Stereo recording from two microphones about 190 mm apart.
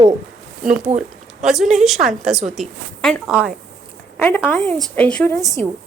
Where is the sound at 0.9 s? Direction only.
35° right (ahead or behind).